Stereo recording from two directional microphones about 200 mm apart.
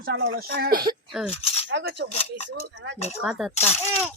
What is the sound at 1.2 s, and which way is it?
Chink, 30° left (ahead or behind).